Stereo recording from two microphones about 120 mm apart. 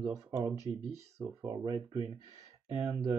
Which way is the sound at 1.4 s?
35° right (ahead or behind).